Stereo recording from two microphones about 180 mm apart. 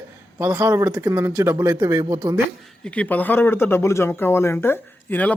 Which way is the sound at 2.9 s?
10° left (ahead or behind).